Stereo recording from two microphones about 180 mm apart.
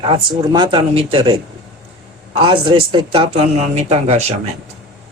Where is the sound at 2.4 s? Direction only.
25° right (ahead or behind).